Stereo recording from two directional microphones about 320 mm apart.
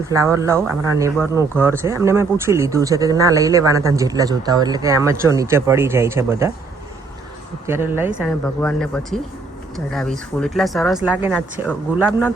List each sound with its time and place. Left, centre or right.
0.1 s speech: centre
7.7 s speech: centre